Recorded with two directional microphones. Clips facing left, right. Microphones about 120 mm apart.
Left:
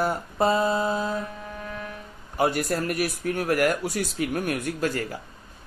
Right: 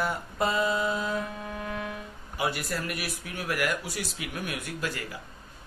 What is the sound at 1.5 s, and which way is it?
Music, 5° right (ahead or behind).